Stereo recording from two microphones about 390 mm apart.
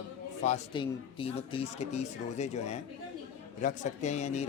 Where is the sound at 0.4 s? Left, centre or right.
Centre.